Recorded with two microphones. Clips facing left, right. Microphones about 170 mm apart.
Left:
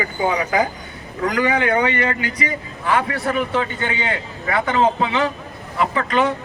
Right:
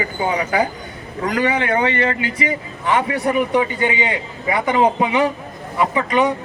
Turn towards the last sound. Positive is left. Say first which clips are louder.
# right 2 dB
turn(degrees=-15)  # may be behind; listen again after turning